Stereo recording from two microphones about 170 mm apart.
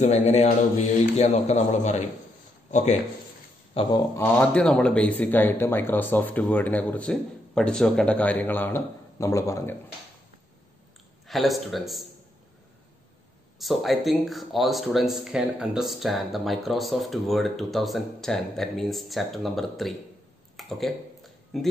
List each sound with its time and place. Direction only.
0.0 s speech: 40° left (ahead or behind)
4.2 s speech: 5° left (ahead or behind)
11.2 s speech: centre (ahead or behind)
13.6 s speech: centre (ahead or behind)
20.5 s a sound: centre (ahead or behind)